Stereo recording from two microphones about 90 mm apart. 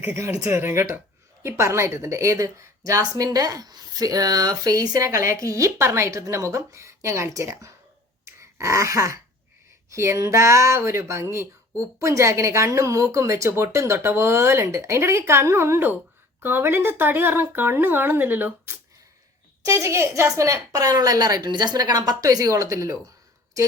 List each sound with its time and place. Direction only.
0.0 s a woman's voice: 25° right (ahead or behind)
8.4 s throat clearing: 35° right (ahead or behind)
9.9 s a woman's voice: 35° right (ahead or behind)